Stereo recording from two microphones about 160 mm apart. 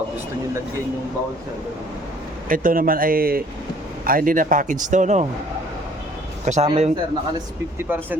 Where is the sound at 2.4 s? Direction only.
60° right (ahead or behind).